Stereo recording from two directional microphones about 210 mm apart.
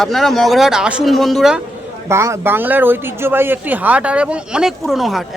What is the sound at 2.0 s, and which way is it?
A man's voice, 15° right (ahead or behind).